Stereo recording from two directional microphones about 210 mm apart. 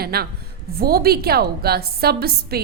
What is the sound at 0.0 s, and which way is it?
A woman's voice, 45° right (ahead or behind).